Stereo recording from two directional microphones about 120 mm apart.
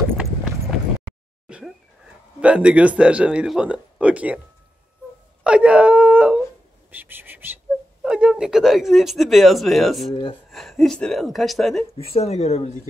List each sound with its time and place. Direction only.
1.5 s a sound: 10° right (ahead or behind)
2.4 s speech: 10° right (ahead or behind)
5.4 s speech: 10° right (ahead or behind)
11.8 s speech: 55° left (ahead or behind)